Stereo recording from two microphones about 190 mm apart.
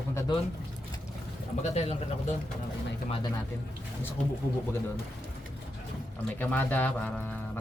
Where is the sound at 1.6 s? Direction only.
35° left (ahead or behind).